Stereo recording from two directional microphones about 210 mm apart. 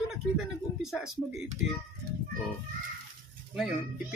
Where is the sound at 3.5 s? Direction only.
Centre (ahead or behind).